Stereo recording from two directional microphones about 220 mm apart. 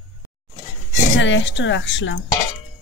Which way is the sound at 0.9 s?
55° left (ahead or behind).